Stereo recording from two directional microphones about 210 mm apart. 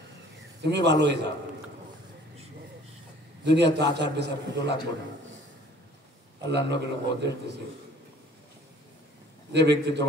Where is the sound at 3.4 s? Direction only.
55° right (ahead or behind).